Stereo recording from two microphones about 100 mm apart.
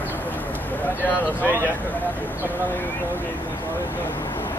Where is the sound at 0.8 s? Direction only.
15° left (ahead or behind).